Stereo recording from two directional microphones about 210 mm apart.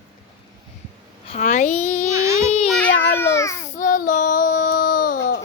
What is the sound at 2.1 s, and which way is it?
Baby cry, 15° right (ahead or behind).